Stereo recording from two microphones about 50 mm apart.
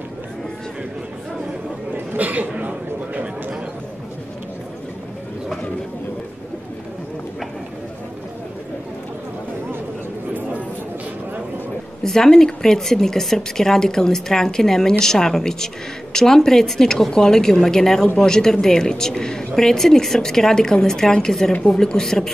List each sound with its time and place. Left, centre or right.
2.1 s cough: right
12.0 s a woman's voice: centre